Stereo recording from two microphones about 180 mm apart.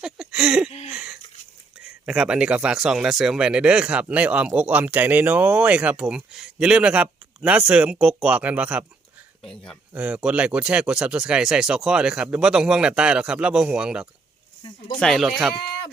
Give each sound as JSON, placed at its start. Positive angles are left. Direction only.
{"t": 0.0, "sound": "speech", "side_deg": -5}
{"t": 0.9, "sound": "a sound", "side_deg": -5}
{"t": 1.8, "sound": "speech", "side_deg": -5}
{"t": 9.4, "sound": "speech", "side_deg": 5}